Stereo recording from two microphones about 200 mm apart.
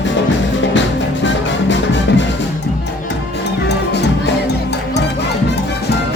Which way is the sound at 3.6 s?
55° left (ahead or behind).